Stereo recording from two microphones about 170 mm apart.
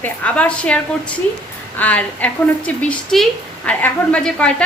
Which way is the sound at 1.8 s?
10° left (ahead or behind).